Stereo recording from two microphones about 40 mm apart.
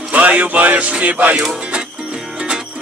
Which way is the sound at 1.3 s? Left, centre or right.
Right.